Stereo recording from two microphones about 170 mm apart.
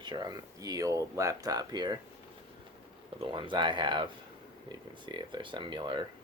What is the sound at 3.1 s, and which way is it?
Speech, 30° right (ahead or behind).